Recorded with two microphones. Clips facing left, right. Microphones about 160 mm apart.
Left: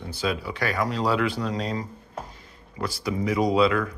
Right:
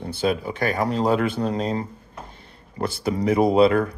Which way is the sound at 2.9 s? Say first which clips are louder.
Right 5 dB; 55° right (ahead or behind).